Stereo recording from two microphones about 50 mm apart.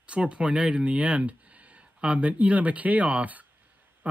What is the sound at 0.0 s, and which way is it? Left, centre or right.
Speech, right.